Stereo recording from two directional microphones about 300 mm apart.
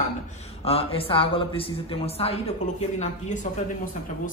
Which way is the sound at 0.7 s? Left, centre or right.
Centre.